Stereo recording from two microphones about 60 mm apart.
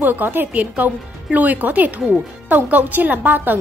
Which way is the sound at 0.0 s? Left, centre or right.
Right.